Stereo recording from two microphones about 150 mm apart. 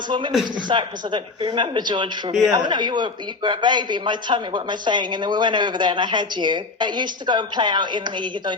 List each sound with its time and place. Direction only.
0.1 s speech: 30° right (ahead or behind)